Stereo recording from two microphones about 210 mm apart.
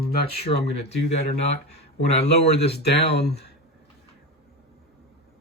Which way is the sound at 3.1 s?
50° left (ahead or behind).